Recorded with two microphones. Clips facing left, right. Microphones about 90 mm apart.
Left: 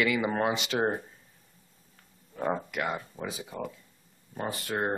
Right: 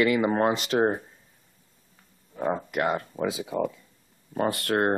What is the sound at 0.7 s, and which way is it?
Speech, 20° right (ahead or behind).